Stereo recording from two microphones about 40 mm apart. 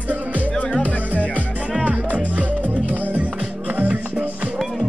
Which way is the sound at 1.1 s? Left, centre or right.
Left.